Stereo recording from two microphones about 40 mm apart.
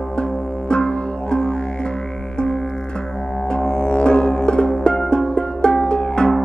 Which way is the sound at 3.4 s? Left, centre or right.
Left.